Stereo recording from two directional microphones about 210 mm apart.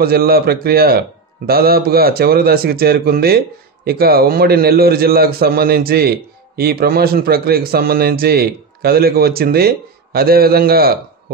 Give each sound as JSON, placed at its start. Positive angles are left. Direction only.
{"t": 0.0, "sound": "a man's voice", "side_deg": -45}